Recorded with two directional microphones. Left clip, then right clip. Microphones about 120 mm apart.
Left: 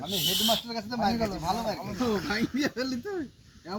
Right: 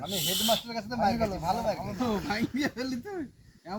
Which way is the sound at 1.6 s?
30° right (ahead or behind).